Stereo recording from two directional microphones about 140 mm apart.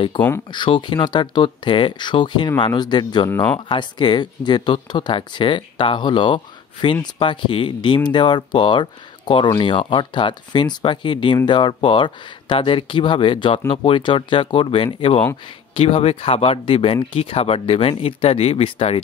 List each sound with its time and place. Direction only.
0.2 s speech: 35° left (ahead or behind)